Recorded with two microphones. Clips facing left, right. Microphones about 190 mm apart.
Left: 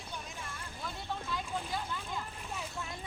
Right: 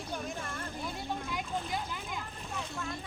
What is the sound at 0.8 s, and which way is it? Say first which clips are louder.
Boat: right 1 dB; 15° right (ahead or behind).